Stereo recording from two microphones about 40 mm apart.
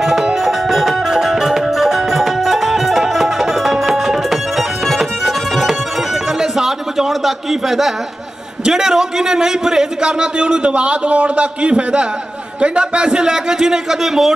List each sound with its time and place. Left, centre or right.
0.0 s music: centre
6.4 s a sound: centre
8.6 s a man's voice: centre